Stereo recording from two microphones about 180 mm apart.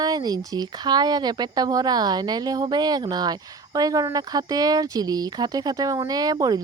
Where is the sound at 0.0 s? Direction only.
20° right (ahead or behind).